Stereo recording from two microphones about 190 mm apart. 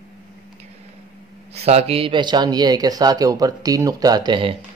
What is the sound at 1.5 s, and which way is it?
Speech, 35° right (ahead or behind).